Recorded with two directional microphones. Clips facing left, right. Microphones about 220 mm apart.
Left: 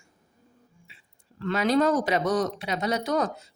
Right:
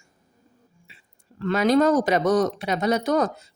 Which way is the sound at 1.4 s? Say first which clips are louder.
Right 4 dB; 45° right (ahead or behind).